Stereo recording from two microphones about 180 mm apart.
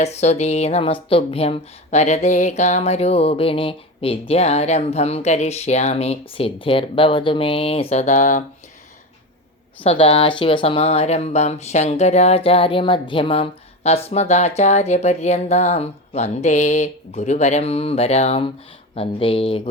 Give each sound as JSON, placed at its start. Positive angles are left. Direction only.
{"t": 0.0, "sound": "speech", "side_deg": 40}
{"t": 9.8, "sound": "speech", "side_deg": 30}